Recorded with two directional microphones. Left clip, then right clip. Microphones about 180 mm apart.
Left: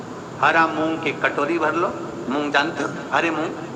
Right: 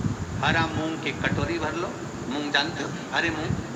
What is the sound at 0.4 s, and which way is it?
A man's voice, 20° left (ahead or behind).